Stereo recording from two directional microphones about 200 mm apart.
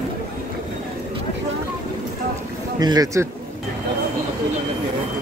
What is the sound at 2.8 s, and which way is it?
Speech, 20° right (ahead or behind).